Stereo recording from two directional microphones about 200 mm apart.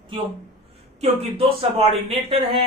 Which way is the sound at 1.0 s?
30° right (ahead or behind).